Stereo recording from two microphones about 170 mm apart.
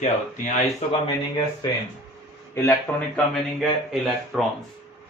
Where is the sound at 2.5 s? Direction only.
10° left (ahead or behind).